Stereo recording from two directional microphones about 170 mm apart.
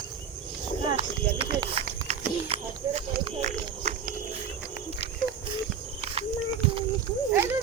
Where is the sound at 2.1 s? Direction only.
40° right (ahead or behind).